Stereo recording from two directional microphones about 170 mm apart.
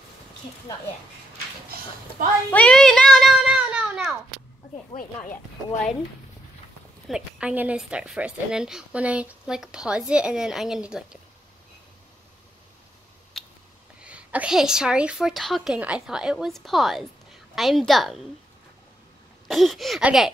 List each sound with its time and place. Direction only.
2.5 s a sound: 5° left (ahead or behind)
4.9 s speech: 45° left (ahead or behind)
7.1 s a woman's voice: 5° right (ahead or behind)
13.4 s a sound: centre (ahead or behind)
14.0 s a woman's voice: 5° right (ahead or behind)
19.4 s a woman's voice: centre (ahead or behind)